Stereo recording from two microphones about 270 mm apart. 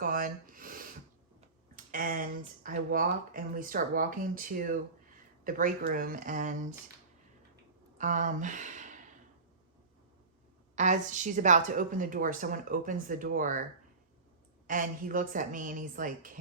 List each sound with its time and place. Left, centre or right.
0.0 s a sound: right
2.6 s speech: right
7.9 s speech: right
10.8 s a woman's voice: right
14.7 s a woman's voice: right